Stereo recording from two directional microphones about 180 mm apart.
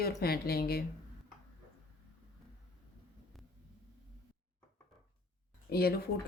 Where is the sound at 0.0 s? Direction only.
60° left (ahead or behind).